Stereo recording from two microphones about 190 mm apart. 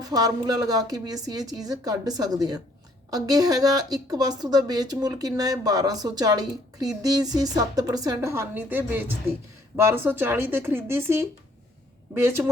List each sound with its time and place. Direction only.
0.0 s a woman's voice: 20° right (ahead or behind)